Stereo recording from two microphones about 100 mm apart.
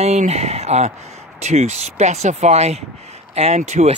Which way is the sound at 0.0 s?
90° right.